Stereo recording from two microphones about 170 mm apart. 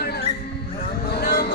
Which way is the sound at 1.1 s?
65° left (ahead or behind).